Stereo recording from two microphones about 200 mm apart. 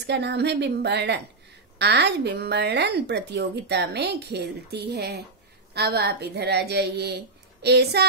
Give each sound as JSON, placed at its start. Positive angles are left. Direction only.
{"t": 0.0, "sound": "a woman's voice", "side_deg": -60}